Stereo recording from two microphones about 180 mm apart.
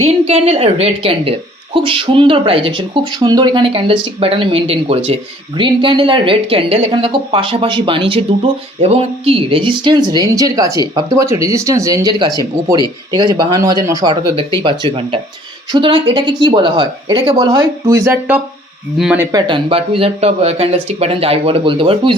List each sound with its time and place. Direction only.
0.3 s speech: 35° right (ahead or behind); by 19.3 s 5° right (ahead or behind)
19.3 s speech: 25° right (ahead or behind)